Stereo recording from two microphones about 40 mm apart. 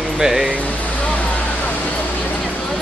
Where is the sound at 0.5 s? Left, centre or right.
Left.